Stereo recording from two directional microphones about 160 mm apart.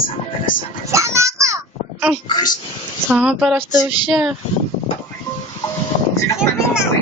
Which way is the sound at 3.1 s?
5° right (ahead or behind).